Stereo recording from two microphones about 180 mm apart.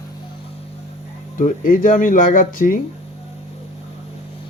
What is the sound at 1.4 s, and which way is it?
Speech, 50° left (ahead or behind).